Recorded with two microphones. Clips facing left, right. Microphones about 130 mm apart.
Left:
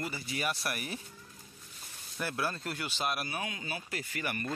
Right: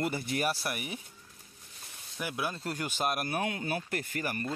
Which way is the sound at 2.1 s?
10° right (ahead or behind).